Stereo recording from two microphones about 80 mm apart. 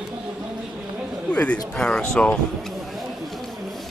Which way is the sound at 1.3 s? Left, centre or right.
Centre.